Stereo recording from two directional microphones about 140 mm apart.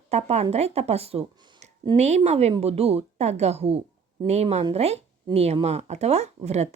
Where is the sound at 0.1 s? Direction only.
50° right (ahead or behind).